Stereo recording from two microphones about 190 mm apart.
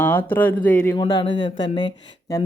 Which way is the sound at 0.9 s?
25° left (ahead or behind).